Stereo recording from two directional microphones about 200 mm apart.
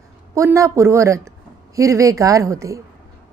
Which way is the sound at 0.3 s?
15° right (ahead or behind).